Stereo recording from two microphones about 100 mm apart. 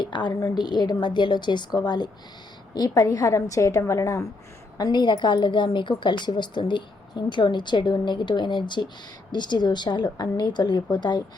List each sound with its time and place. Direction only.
0.0 s a woman's voice: 50° left (ahead or behind); by 4.3 s 30° left (ahead or behind)
4.8 s a woman's voice: 50° left (ahead or behind)